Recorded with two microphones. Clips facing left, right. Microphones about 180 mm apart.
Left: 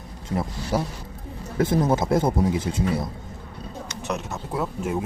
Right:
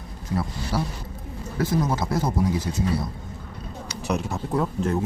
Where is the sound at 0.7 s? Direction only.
20° left (ahead or behind).